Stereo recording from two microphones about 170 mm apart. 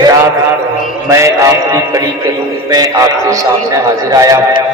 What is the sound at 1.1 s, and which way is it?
Music, 15° right (ahead or behind).